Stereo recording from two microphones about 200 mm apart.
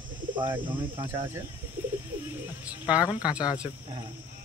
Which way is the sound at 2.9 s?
5° right (ahead or behind).